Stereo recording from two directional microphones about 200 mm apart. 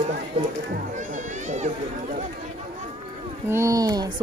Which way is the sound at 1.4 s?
35° right (ahead or behind).